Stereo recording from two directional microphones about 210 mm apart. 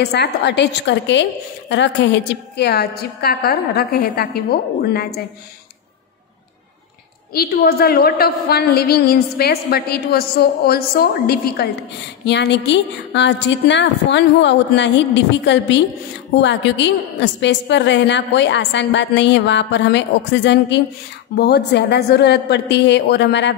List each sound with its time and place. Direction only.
0.0 s a woman's voice: 55° left (ahead or behind)
7.3 s a woman's voice: 45° left (ahead or behind)